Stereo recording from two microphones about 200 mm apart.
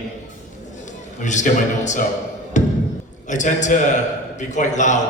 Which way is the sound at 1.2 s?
35° left (ahead or behind).